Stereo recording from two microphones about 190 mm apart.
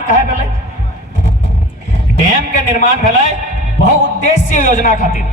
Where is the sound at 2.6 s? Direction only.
45° left (ahead or behind).